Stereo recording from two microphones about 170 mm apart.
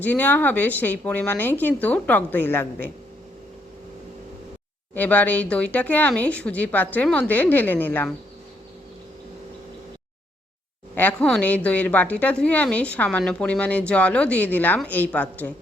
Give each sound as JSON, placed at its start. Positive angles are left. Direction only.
{"t": 0.0, "sound": "a woman's voice", "side_deg": 10}
{"t": 4.9, "sound": "a woman's voice", "side_deg": 10}
{"t": 10.9, "sound": "a woman's voice", "side_deg": 10}